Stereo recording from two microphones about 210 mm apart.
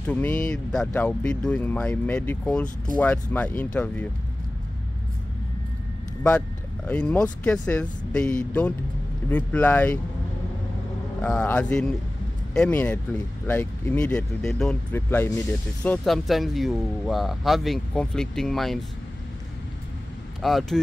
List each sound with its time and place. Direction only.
0.0 s speech: 5° left (ahead or behind)
6.9 s speech: 5° left (ahead or behind)
9.3 s speech: 5° left (ahead or behind)
11.1 s speech: 5° left (ahead or behind)
20.4 s speech: centre (ahead or behind)